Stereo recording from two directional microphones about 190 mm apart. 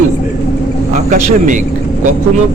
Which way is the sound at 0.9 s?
40° right (ahead or behind).